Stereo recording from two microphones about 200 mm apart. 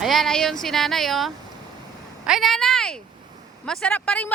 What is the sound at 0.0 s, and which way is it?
Speech, centre (ahead or behind).